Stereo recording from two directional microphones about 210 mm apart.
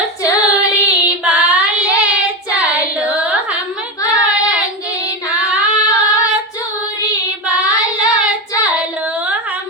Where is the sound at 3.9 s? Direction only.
15° left (ahead or behind).